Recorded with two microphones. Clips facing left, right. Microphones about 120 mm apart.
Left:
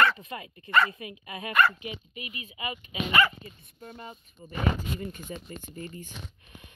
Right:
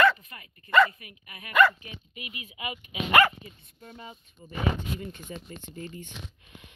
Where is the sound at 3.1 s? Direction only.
55° right (ahead or behind).